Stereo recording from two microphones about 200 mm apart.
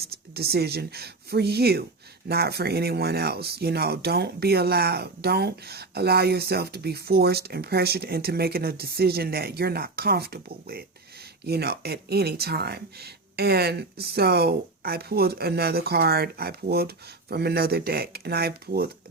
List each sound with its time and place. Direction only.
0.3 s speech: 50° right (ahead or behind)